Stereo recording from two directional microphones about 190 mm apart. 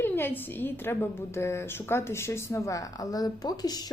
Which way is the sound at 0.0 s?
10° left (ahead or behind).